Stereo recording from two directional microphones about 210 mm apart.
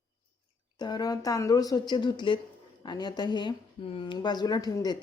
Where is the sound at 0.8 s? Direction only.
20° left (ahead or behind).